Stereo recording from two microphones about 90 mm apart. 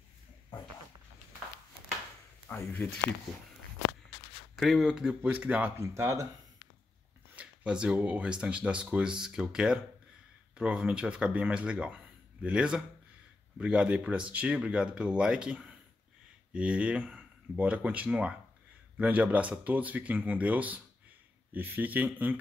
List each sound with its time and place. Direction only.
2.5 s speech: 25° left (ahead or behind)
4.6 s speech: centre (ahead or behind)
5.2 s speech: 20° right (ahead or behind)
5.8 s speech: 30° right (ahead or behind)
7.3 s speech: 10° right (ahead or behind)